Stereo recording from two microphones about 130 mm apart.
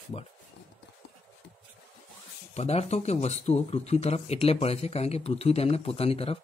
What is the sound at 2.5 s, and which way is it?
Speech, 50° left (ahead or behind).